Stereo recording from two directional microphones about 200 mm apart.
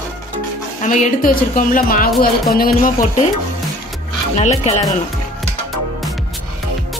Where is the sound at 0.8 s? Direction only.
40° left (ahead or behind).